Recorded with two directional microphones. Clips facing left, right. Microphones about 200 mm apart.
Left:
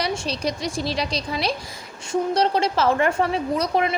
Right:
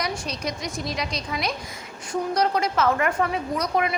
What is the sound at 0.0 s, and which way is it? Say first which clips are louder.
A woman's voice: left 4 dB; 30° left (ahead or behind).